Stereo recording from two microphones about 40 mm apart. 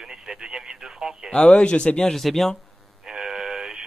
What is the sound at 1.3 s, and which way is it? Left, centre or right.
Speech, left.